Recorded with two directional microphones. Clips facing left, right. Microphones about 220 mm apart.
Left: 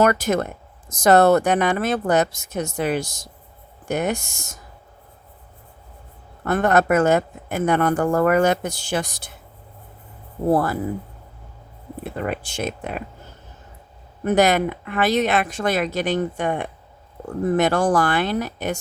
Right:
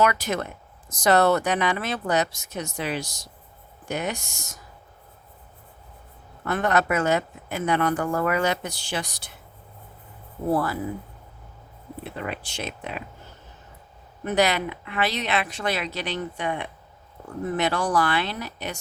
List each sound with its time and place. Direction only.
0.0 s speech: 45° left (ahead or behind)
6.4 s speech: 50° left (ahead or behind)
10.5 s speech: 45° left (ahead or behind)
12.1 s speech: 45° left (ahead or behind)
14.3 s speech: 50° left (ahead or behind)